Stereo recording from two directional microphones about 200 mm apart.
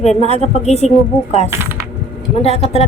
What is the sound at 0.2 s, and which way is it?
Speech, 35° left (ahead or behind).